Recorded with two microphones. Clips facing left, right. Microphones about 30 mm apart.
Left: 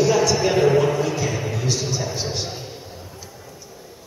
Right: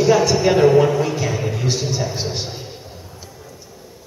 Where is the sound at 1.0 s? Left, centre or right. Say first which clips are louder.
Right 2 dB; centre.